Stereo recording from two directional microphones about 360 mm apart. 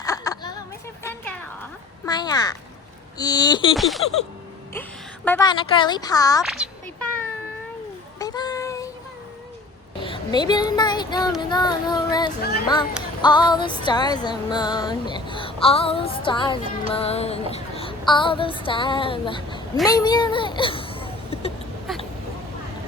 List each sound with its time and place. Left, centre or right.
0.0 s a sound: centre
2.0 s music: centre
3.8 s baby laughter: centre
4.7 s a woman's voice: centre
8.2 s child singing: centre
10.0 s speech: centre
11.3 s music: centre
12.4 s speech: left
13.2 s music: centre
19.8 s speech: centre
21.9 s duck: centre